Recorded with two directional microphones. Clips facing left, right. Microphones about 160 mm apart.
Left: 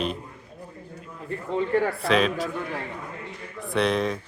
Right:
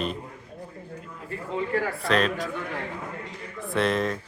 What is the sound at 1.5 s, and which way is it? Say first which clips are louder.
Speech: left 4 dB; 25° left (ahead or behind).